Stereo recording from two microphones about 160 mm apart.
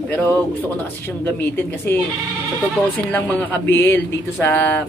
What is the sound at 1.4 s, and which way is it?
Speech, 10° left (ahead or behind).